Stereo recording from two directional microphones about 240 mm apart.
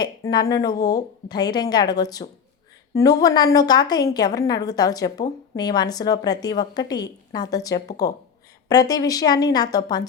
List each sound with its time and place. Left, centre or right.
0.0 s a woman's voice: centre